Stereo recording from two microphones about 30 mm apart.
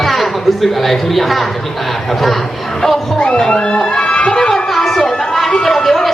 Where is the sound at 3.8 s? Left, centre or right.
Centre.